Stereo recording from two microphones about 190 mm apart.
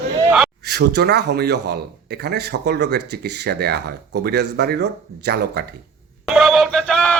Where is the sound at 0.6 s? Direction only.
60° right (ahead or behind).